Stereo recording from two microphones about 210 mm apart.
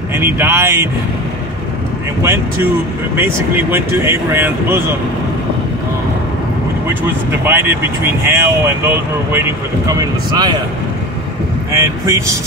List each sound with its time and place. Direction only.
0.1 s speech: 10° right (ahead or behind)
3.2 s speech: 10° right (ahead or behind)
7.4 s speech: 10° right (ahead or behind)
9.8 s speech: 15° right (ahead or behind)
11.7 s speech: 15° right (ahead or behind)